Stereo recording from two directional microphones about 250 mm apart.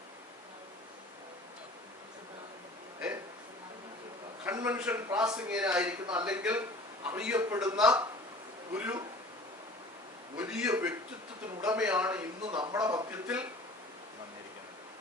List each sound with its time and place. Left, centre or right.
4.4 s a man's voice: centre
10.3 s a man's voice: centre
12.5 s a man's voice: centre
13.2 s a sound: centre